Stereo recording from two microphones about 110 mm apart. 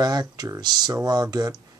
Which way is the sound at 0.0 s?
35° right (ahead or behind).